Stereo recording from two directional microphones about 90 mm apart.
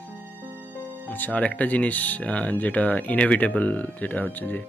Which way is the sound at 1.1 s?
15° left (ahead or behind).